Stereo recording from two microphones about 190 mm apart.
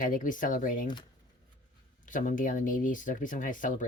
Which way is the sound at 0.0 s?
45° left (ahead or behind).